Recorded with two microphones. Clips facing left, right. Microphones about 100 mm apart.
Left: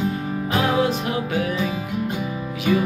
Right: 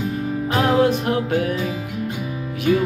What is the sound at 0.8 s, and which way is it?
Music, 55° right (ahead or behind).